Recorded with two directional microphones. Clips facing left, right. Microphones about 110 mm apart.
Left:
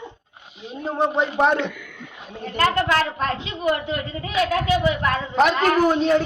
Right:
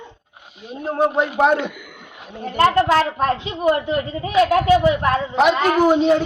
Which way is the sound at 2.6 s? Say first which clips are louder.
Right 5 dB; 30° right (ahead or behind).